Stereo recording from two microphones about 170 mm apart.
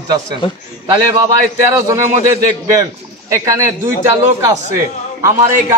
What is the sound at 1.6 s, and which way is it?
A man's voice, 15° right (ahead or behind).